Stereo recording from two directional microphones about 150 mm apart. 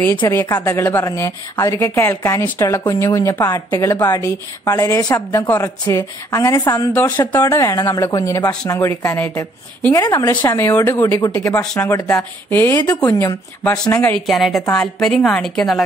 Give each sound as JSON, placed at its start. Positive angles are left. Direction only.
{"t": 0.2, "sound": "a woman's voice", "side_deg": 20}
{"t": 14.1, "sound": "a woman's voice", "side_deg": 0}